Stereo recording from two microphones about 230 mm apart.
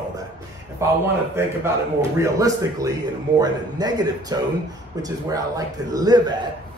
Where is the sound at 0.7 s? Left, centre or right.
Centre.